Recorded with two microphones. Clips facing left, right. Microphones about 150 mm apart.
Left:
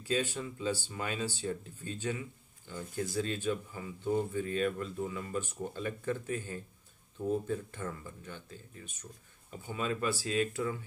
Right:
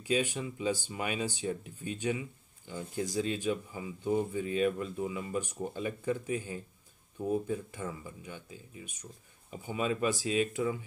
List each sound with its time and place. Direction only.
0.0 s speech: 15° right (ahead or behind)